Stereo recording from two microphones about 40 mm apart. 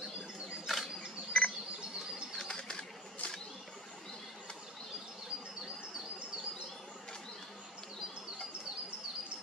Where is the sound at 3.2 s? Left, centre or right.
Left.